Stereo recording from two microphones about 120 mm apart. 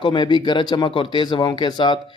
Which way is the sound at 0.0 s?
40° left (ahead or behind).